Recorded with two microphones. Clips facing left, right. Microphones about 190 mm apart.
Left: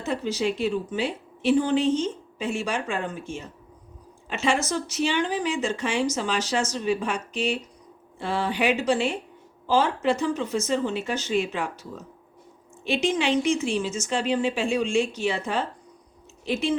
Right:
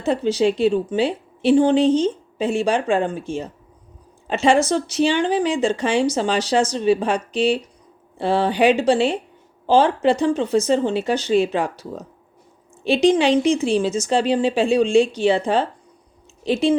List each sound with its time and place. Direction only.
0.0 s a woman's voice: 30° right (ahead or behind)